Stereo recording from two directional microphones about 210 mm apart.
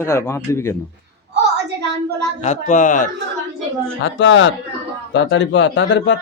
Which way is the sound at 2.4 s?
35° left (ahead or behind).